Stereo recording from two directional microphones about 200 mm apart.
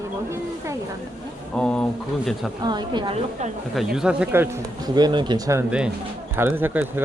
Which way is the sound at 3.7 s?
5° right (ahead or behind).